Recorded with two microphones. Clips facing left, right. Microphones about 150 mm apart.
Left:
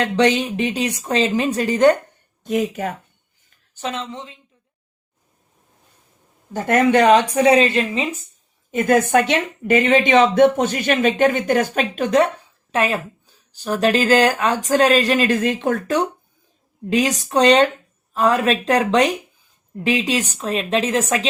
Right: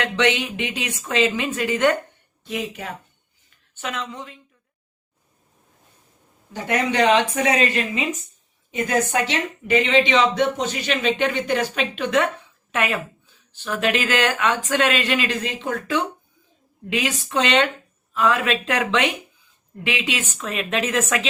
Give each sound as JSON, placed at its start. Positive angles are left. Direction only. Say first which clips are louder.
{"t": 0.0, "sound": "speech", "louder": "left 4 dB", "side_deg": 35}
{"t": 3.8, "sound": "a woman's voice", "louder": "left 3 dB", "side_deg": 30}
{"t": 6.5, "sound": "speech", "louder": "left 7 dB", "side_deg": 50}
{"t": 7.4, "sound": "a woman's voice", "louder": "left 6 dB", "side_deg": 30}
{"t": 8.7, "sound": "speech", "louder": "left 6 dB", "side_deg": 55}